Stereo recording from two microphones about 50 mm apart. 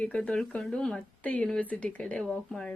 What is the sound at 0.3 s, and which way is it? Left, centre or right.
Speech, centre.